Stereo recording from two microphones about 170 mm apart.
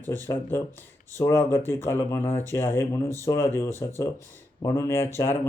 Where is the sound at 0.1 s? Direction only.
10° left (ahead or behind).